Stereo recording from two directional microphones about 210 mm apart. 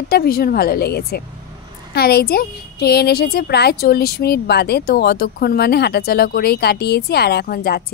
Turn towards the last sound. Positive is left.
turn(degrees=50)  # may be behind; listen again after turning